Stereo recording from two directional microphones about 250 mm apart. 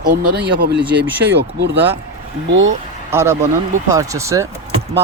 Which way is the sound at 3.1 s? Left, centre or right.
Centre.